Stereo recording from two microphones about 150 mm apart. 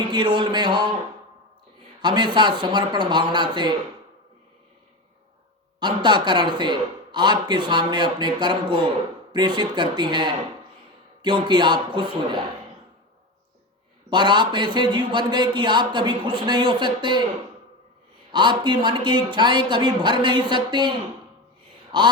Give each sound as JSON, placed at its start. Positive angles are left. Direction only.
{"t": 0.0, "sound": "speech", "side_deg": -30}
{"t": 2.0, "sound": "speech", "side_deg": -30}
{"t": 5.8, "sound": "speech", "side_deg": -30}
{"t": 14.1, "sound": "speech", "side_deg": -30}
{"t": 18.3, "sound": "speech", "side_deg": -30}